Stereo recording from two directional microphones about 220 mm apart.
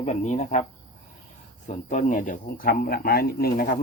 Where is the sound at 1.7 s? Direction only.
35° left (ahead or behind).